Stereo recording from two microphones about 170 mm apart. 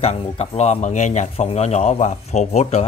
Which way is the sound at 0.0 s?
35° left (ahead or behind).